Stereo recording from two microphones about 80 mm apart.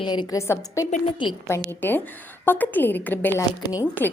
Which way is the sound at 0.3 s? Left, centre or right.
Left.